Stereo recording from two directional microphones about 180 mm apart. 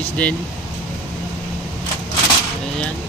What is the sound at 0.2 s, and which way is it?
Speech, 5° left (ahead or behind).